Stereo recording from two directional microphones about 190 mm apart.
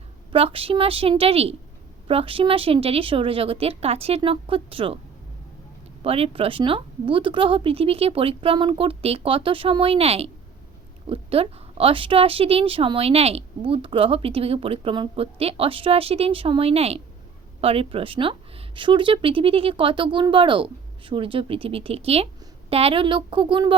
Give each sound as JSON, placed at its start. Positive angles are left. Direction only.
{"t": 0.3, "sound": "speech", "side_deg": -30}
{"t": 6.0, "sound": "speech", "side_deg": -30}